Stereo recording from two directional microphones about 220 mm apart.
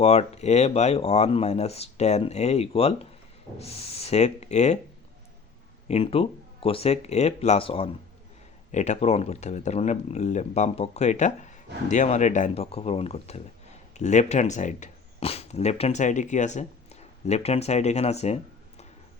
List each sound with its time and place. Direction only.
0.0 s speech: 30° left (ahead or behind)
5.9 s speech: 25° left (ahead or behind)